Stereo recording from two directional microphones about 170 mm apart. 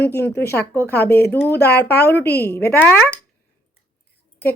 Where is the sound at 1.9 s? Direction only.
70° left (ahead or behind).